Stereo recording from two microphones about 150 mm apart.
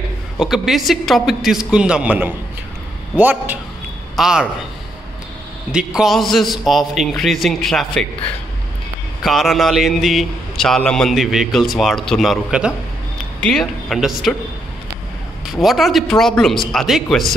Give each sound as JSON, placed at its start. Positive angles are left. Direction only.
{"t": 0.4, "sound": "a man's voice", "side_deg": 0}
{"t": 5.7, "sound": "a man's voice", "side_deg": -5}
{"t": 9.2, "sound": "a man's voice", "side_deg": 0}
{"t": 15.5, "sound": "a man's voice", "side_deg": 0}